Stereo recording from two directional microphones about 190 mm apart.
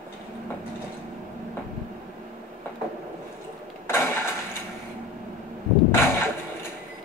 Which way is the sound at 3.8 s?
15° left (ahead or behind).